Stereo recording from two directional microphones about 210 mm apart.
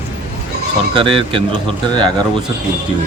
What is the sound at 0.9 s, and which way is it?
Speech, 25° right (ahead or behind).